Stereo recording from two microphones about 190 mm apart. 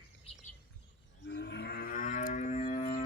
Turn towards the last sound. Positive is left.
turn(degrees=35)  # may be behind; listen again after turning